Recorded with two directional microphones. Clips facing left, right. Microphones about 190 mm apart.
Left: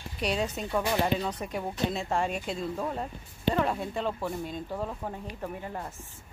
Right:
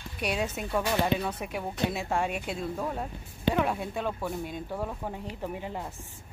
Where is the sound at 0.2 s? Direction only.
5° right (ahead or behind).